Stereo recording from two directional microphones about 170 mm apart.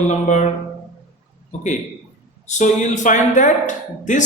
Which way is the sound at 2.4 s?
45° left (ahead or behind).